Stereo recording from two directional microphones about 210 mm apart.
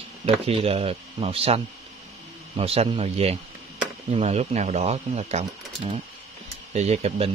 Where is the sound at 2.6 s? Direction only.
30° right (ahead or behind).